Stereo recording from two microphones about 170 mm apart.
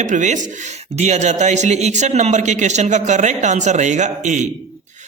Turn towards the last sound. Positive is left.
turn(degrees=-45)  # may be behind; listen again after turning